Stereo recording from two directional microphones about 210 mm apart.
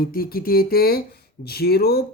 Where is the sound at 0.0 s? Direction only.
45° left (ahead or behind).